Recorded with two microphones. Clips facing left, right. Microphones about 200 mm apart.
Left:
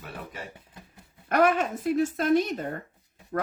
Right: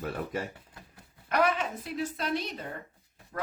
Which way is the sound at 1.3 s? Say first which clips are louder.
Left 5 dB; 45° left (ahead or behind).